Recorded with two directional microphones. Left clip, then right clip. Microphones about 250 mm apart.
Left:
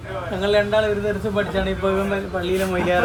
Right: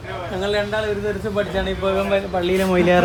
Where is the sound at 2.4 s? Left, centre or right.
Right.